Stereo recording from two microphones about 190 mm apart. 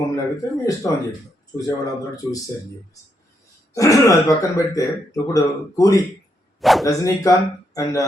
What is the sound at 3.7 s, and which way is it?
Speech, 15° left (ahead or behind).